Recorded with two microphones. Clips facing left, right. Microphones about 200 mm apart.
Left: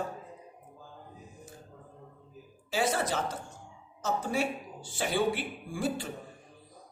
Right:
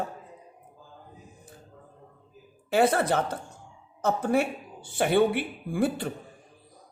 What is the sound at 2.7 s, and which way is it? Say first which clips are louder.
Speech: right 7 dB; 60° right (ahead or behind).